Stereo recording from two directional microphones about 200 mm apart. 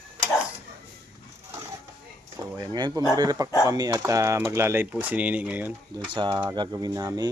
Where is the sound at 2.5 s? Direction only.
20° right (ahead or behind).